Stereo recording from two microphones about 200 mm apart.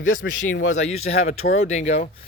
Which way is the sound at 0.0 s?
70° left (ahead or behind).